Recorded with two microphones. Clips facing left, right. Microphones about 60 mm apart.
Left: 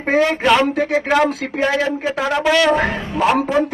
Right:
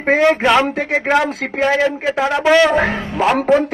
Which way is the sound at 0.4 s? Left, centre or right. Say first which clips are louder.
Right 1 dB; centre.